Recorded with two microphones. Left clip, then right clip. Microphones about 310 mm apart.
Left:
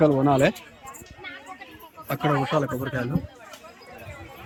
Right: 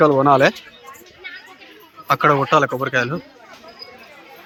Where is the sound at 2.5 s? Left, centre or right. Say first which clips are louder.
Right 9 dB; centre.